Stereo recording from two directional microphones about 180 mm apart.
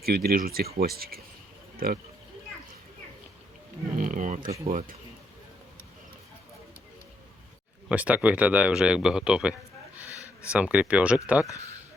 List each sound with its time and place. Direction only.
0.0 s speech: 55° right (ahead or behind)
3.9 s speech: 45° right (ahead or behind)
4.6 s speech: 35° right (ahead or behind)
7.9 s speech: 10° right (ahead or behind)